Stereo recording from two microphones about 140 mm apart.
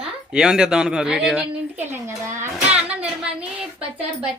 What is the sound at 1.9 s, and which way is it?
Speech, 20° right (ahead or behind).